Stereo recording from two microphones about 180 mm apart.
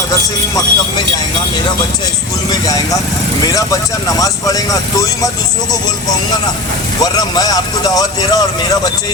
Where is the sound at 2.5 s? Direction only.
20° left (ahead or behind).